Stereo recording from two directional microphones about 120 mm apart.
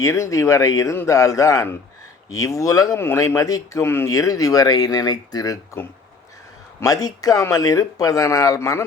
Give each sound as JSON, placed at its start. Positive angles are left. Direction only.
{"t": 0.0, "sound": "speech", "side_deg": 25}
{"t": 6.7, "sound": "speech", "side_deg": 30}